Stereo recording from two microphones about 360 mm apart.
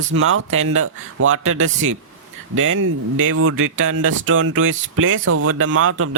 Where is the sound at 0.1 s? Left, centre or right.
Right.